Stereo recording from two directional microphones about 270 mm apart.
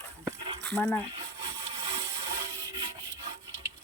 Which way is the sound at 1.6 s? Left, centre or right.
Centre.